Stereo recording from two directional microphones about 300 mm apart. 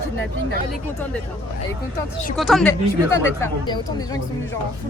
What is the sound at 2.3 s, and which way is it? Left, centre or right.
Speech, centre.